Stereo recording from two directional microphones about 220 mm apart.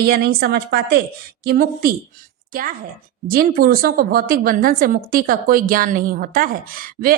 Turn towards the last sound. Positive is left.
turn(degrees=-40)  # may be behind; listen again after turning